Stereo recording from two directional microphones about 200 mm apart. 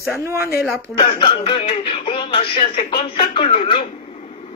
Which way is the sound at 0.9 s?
25° left (ahead or behind).